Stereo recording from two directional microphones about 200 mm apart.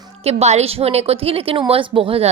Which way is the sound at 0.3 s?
35° right (ahead or behind).